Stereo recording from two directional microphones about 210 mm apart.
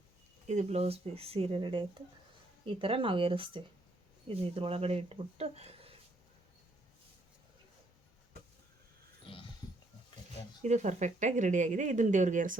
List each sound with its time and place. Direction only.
0.4 s speech: 30° right (ahead or behind)
9.2 s dog: 25° left (ahead or behind)
10.6 s speech: 35° right (ahead or behind)